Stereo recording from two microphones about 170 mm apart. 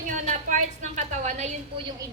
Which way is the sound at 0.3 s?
45° right (ahead or behind).